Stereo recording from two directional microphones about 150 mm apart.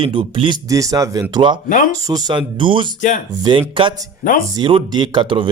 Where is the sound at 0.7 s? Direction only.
20° right (ahead or behind).